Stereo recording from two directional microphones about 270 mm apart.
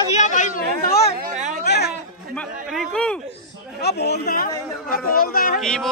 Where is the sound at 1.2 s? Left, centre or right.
Right.